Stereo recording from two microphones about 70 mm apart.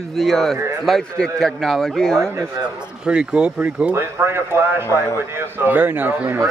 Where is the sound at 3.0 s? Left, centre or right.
Centre.